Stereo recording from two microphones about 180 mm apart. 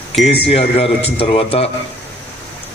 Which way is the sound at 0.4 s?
35° left (ahead or behind).